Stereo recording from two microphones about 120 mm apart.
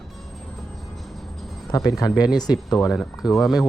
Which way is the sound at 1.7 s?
30° left (ahead or behind).